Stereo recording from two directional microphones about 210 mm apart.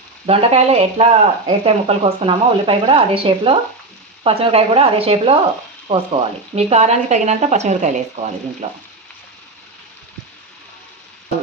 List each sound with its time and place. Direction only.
0.3 s a woman's voice: 30° right (ahead or behind)